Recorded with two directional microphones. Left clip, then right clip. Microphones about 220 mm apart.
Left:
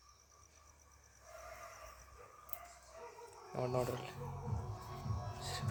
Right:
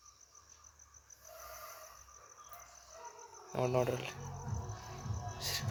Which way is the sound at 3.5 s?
20° right (ahead or behind).